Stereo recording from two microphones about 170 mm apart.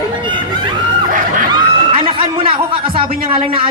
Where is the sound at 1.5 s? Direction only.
30° right (ahead or behind).